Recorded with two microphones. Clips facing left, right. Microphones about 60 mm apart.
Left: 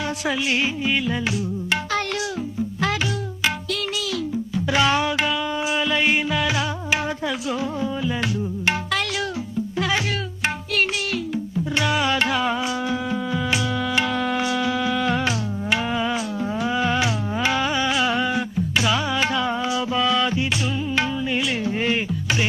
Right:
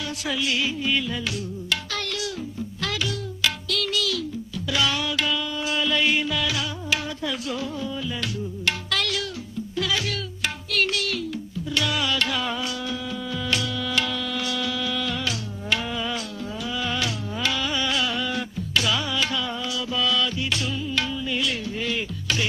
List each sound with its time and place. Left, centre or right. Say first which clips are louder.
0.3 s music: left 2 dB; left